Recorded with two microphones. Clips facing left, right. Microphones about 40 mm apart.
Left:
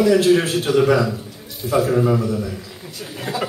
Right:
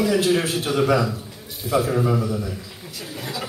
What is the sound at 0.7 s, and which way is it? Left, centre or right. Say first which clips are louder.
Speech: left 4 dB; centre.